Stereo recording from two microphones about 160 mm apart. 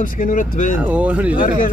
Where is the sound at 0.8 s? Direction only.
10° right (ahead or behind).